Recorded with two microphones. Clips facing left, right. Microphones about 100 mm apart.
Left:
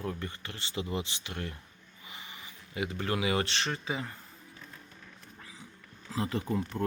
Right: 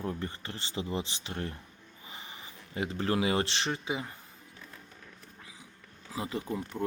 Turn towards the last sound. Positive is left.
turn(degrees=-10)  # may be behind; listen again after turning